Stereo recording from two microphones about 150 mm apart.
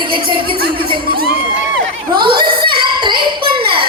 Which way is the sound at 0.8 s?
85° right.